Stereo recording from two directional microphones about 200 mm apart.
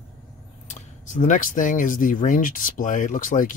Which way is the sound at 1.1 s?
40° left (ahead or behind).